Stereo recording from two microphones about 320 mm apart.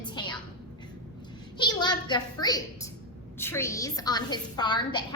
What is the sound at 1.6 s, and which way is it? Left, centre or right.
A woman's voice, centre.